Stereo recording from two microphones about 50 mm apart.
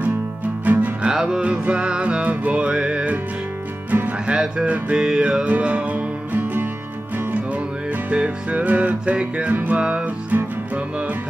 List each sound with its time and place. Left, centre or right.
0.7 s music: right
1.0 s music: centre
3.9 s music: right
4.3 s speech: centre
4.9 s music: centre
5.4 s music: right
8.1 s music: right
10.3 s music: right